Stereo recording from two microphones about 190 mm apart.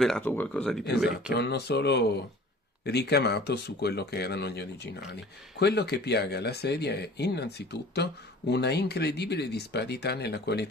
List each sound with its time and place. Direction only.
0.0 s speech: 5° left (ahead or behind)
1.3 s speech: 60° left (ahead or behind)